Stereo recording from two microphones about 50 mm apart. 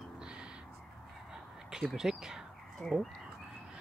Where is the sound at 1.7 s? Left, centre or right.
Centre.